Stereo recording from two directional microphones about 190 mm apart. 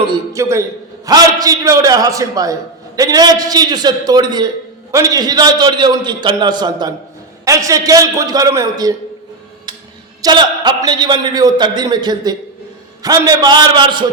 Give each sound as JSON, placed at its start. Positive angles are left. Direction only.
{"t": 0.0, "sound": "a man's voice", "side_deg": -20}
{"t": 10.2, "sound": "a man's voice", "side_deg": -20}